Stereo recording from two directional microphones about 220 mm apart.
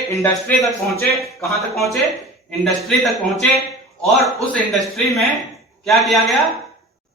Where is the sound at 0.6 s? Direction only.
Centre (ahead or behind).